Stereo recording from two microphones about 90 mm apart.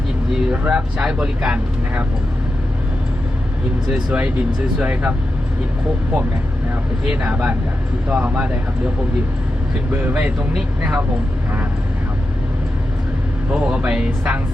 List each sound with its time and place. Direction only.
0.5 s speech: 15° right (ahead or behind)
3.8 s speech: 10° right (ahead or behind)
7.1 s speech: 10° right (ahead or behind)
9.9 s speech: 20° right (ahead or behind)
13.5 s speech: 10° right (ahead or behind)